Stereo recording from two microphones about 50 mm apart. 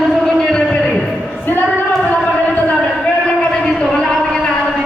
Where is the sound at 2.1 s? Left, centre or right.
Left.